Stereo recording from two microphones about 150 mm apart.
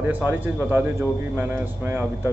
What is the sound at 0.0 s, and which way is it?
A man's voice, 10° right (ahead or behind).